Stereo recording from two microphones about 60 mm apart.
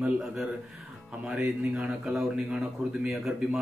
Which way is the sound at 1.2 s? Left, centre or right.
Centre.